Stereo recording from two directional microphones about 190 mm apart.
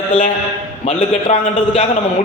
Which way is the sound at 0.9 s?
30° left (ahead or behind).